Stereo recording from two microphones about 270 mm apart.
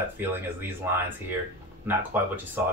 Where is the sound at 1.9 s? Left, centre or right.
Centre.